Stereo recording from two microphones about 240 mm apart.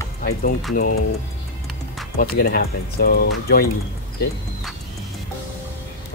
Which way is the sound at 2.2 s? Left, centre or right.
Left.